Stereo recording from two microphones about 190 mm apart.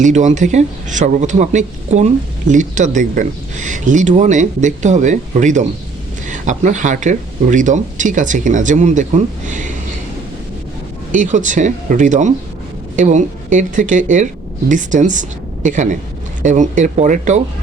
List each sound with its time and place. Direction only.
0.0 s speech: 40° right (ahead or behind)
11.1 s speech: 40° right (ahead or behind)